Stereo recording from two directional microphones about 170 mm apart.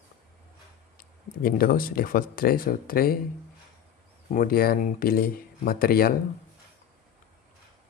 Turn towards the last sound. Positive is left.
turn(degrees=60)  # may be behind; listen again after turning